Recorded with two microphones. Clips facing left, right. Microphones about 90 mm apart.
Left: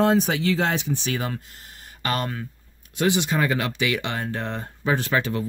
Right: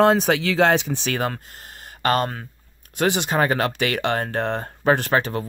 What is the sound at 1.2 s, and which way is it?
Speech, 50° right (ahead or behind).